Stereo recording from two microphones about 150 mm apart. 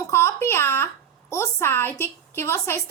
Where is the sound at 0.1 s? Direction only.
20° left (ahead or behind).